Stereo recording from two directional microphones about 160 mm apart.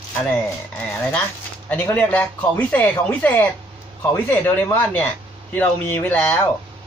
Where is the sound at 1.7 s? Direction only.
10° left (ahead or behind).